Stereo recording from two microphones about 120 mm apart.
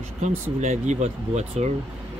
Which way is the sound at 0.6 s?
70° right (ahead or behind).